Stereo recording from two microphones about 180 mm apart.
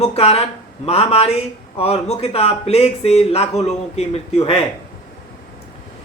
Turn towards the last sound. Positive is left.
turn(degrees=35)  # may be behind; listen again after turning